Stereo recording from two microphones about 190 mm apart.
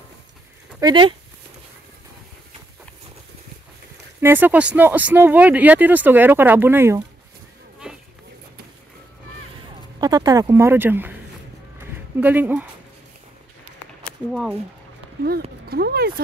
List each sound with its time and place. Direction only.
0.7 s speech: 25° right (ahead or behind)
4.2 s speech: 10° right (ahead or behind)
9.9 s speech: 20° right (ahead or behind)
12.2 s speech: 10° right (ahead or behind)
14.0 s speech: 5° right (ahead or behind)
15.7 s speech: 55° right (ahead or behind)